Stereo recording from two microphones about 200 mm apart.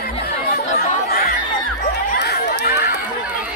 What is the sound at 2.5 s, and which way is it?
Chatter, 55° left (ahead or behind).